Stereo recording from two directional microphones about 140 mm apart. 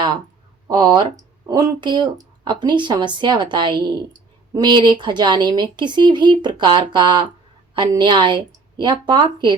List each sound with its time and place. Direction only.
0.7 s speech: 30° right (ahead or behind)